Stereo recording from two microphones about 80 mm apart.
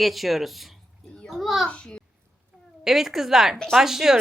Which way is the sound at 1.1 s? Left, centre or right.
Centre.